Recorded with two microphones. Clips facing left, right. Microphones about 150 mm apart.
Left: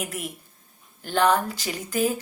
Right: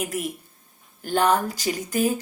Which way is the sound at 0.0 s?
40° right (ahead or behind).